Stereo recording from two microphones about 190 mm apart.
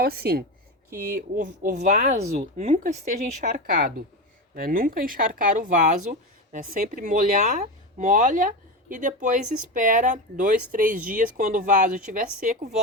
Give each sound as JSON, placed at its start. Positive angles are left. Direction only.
{"t": 0.0, "sound": "speech", "side_deg": -55}